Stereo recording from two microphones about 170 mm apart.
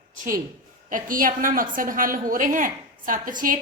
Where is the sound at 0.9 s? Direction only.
50° right (ahead or behind).